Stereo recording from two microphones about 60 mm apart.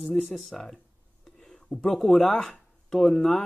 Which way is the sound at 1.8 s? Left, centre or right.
Centre.